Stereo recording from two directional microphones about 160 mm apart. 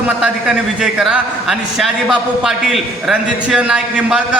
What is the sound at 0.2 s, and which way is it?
A man's voice, 5° right (ahead or behind).